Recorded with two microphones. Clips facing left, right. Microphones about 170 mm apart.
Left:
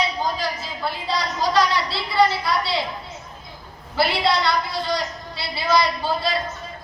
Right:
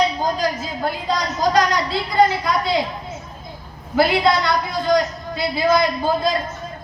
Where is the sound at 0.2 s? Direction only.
45° right (ahead or behind).